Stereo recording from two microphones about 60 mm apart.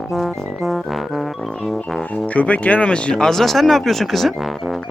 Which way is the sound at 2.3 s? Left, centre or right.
Left.